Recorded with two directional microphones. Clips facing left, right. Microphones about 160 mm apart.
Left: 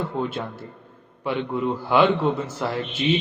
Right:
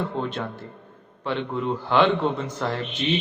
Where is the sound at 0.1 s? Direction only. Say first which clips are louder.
Left 1 dB; 10° left (ahead or behind).